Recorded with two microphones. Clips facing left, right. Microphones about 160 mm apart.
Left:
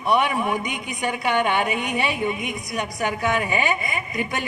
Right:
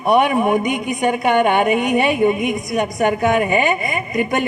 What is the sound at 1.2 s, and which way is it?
A woman's voice, 50° right (ahead or behind).